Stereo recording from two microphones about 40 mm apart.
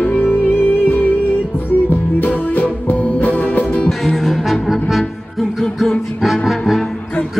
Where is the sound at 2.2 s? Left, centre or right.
Left.